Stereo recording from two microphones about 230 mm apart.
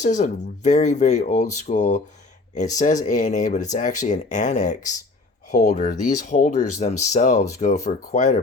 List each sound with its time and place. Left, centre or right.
0.0 s speech: left